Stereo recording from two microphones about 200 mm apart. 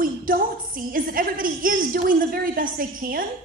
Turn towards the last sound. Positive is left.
turn(degrees=-45)  # may be behind; listen again after turning